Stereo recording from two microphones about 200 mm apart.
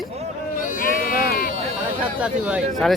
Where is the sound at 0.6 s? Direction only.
45° left (ahead or behind).